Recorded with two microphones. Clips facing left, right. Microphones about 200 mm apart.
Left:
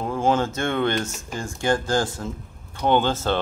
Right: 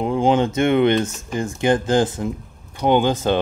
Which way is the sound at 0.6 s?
20° right (ahead or behind).